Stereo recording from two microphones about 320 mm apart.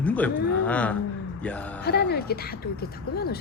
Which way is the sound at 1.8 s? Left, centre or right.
Left.